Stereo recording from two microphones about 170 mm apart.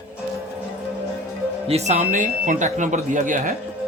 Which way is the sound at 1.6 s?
40° right (ahead or behind).